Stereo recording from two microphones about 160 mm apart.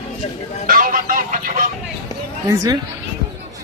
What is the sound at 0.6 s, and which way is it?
Speech, 60° right (ahead or behind).